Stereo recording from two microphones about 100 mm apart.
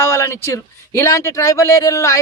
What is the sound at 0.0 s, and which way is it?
Speech, 25° left (ahead or behind).